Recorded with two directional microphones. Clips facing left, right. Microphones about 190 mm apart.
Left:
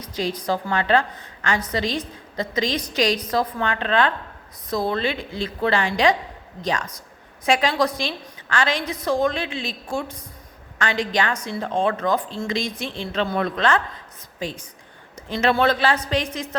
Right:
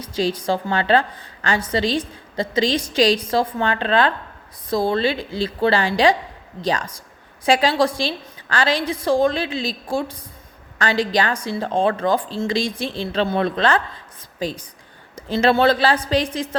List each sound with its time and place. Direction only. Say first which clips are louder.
0.0 s a woman's voice: right 4 dB; 30° right (ahead or behind)